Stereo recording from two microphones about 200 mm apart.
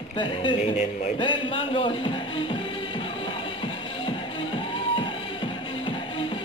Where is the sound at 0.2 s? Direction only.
25° left (ahead or behind).